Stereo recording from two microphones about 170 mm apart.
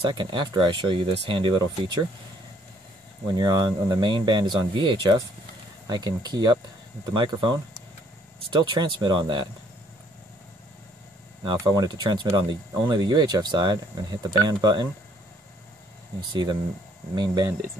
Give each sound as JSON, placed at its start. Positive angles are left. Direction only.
{"t": 0.0, "sound": "speech", "side_deg": -25}
{"t": 3.3, "sound": "speech", "side_deg": -25}
{"t": 8.5, "sound": "speech", "side_deg": -25}
{"t": 11.4, "sound": "speech", "side_deg": -25}
{"t": 16.2, "sound": "speech", "side_deg": -25}